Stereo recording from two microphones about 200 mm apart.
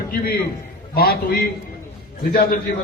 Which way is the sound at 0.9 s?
50° left (ahead or behind).